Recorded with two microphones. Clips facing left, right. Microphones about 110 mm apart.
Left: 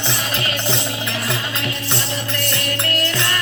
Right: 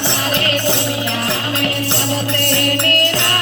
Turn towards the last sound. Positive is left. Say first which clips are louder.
# right 4 dB
turn(degrees=-65)  # may be behind; listen again after turning